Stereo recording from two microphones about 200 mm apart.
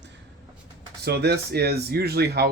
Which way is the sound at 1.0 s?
55° right (ahead or behind).